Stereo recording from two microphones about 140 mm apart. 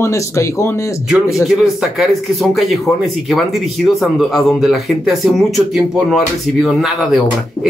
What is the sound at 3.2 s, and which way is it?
A man's voice, centre (ahead or behind).